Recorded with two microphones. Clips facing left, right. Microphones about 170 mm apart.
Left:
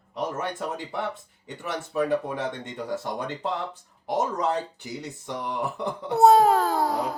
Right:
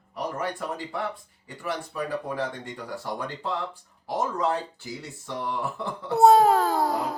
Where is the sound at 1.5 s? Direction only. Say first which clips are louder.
Even; 20° left (ahead or behind).